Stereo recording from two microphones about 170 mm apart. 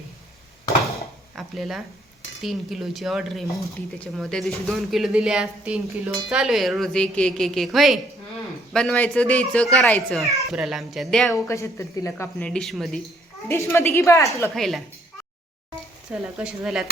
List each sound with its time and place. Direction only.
1.4 s speech: centre (ahead or behind)
11.4 s speech: 15° left (ahead or behind); by 13.0 s centre (ahead or behind)
13.5 s speech: 15° left (ahead or behind)
14.5 s speech: centre (ahead or behind)
16.4 s speech: 5° right (ahead or behind)